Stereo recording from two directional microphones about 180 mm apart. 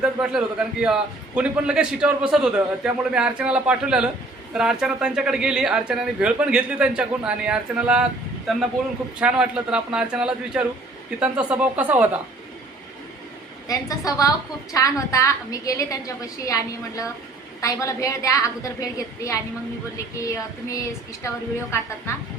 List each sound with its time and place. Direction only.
0.0 s speech: 5° right (ahead or behind)
9.2 s a woman's voice: 5° right (ahead or behind)
13.7 s a woman's voice: 20° left (ahead or behind)